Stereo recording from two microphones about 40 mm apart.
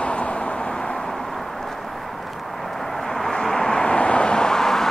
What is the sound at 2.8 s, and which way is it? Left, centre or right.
Vehicle, centre.